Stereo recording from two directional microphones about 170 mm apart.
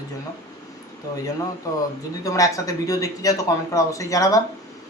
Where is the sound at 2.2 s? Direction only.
20° left (ahead or behind).